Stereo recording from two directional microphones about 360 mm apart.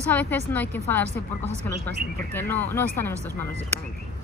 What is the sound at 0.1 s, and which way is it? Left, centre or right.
Speech, centre.